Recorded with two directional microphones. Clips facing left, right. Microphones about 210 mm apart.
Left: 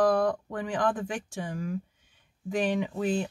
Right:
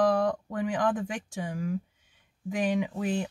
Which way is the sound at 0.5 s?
15° right (ahead or behind).